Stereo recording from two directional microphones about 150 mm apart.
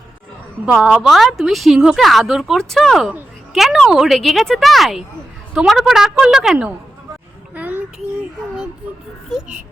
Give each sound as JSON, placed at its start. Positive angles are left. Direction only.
{"t": 0.6, "sound": "a woman's voice", "side_deg": -5}
{"t": 7.5, "sound": "child singing", "side_deg": -10}